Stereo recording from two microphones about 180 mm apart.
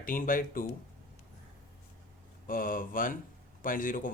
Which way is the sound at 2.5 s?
50° left (ahead or behind).